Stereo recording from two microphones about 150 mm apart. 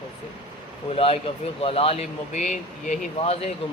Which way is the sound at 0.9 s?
40° left (ahead or behind).